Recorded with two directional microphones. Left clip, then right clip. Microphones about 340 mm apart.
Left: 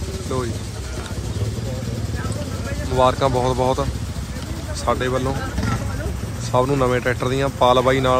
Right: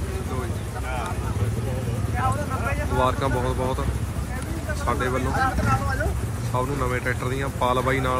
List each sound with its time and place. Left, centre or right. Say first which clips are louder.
3.0 s speech: left 7 dB; centre
4.8 s speech: left 5 dB; centre
6.5 s speech: left 8 dB; centre